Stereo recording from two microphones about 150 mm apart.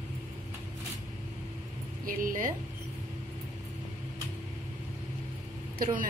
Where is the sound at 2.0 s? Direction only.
65° right (ahead or behind).